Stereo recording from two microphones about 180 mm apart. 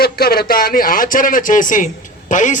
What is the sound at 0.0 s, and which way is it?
A man's voice, 55° left (ahead or behind).